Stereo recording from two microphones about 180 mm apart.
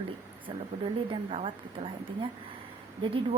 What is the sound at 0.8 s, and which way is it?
Speech, 30° right (ahead or behind).